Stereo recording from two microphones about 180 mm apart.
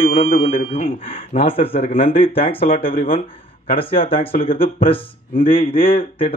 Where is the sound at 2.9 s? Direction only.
50° left (ahead or behind).